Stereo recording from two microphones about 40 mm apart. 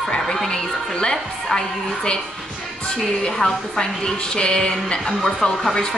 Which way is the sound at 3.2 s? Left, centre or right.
Centre.